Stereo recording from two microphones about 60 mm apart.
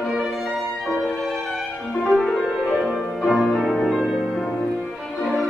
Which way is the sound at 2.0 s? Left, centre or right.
Centre.